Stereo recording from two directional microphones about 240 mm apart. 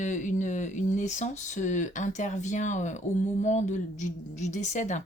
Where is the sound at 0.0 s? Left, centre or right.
Left.